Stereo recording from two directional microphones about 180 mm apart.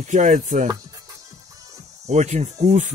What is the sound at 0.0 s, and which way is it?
Speech, 45° right (ahead or behind).